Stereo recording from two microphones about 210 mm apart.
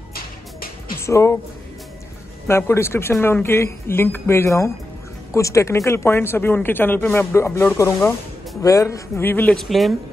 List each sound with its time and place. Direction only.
0.1 s music: 45° left (ahead or behind)
1.0 s speech: 15° left (ahead or behind)
2.4 s speech: 10° left (ahead or behind)